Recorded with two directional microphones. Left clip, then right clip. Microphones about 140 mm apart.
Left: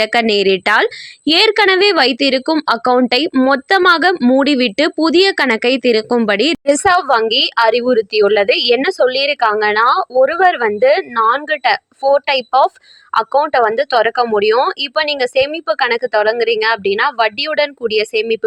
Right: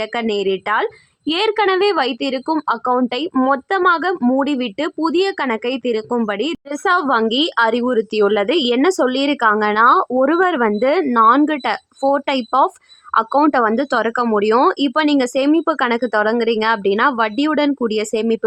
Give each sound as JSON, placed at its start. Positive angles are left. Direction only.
{"t": 0.0, "sound": "a woman's voice", "side_deg": 20}
{"t": 6.7, "sound": "a woman's voice", "side_deg": 30}